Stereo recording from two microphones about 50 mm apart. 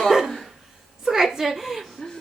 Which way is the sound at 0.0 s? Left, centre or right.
Centre.